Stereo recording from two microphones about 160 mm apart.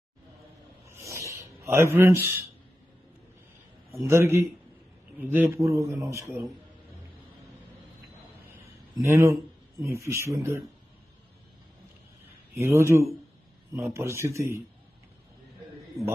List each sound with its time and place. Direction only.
0.9 s a sound: 15° right (ahead or behind)
4.0 s speech: 15° right (ahead or behind)
9.0 s speech: 20° right (ahead or behind)
12.5 s speech: 15° right (ahead or behind)